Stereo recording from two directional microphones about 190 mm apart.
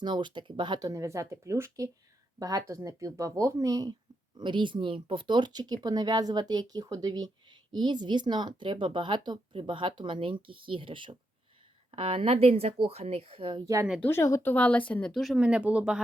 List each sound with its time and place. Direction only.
0.0 s speech: 25° right (ahead or behind)
14.0 s speech: 15° left (ahead or behind); by 16.0 s 5° right (ahead or behind)